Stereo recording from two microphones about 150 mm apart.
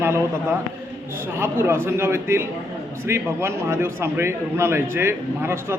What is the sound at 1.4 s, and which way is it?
A man's voice, 15° right (ahead or behind).